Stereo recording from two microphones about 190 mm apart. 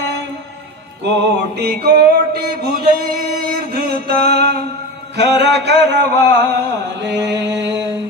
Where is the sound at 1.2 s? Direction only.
60° right (ahead or behind).